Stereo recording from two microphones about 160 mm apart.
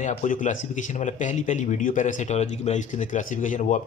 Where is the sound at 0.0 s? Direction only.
50° left (ahead or behind).